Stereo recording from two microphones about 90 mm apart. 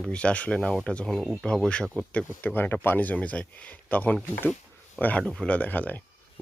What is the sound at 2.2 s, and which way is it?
Speech, 20° left (ahead or behind).